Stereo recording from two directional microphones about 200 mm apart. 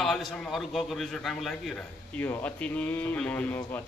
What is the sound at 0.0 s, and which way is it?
A man's voice, centre (ahead or behind).